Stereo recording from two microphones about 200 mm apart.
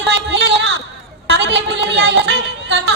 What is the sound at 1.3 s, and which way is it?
A woman's voice, 60° right (ahead or behind).